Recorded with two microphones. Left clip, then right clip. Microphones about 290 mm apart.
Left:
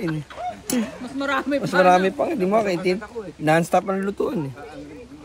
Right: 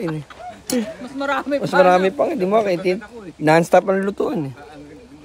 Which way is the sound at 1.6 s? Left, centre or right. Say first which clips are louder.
Right 3 dB; right.